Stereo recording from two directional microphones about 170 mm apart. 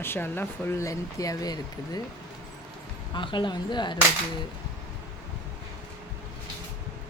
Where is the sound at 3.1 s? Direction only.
30° left (ahead or behind).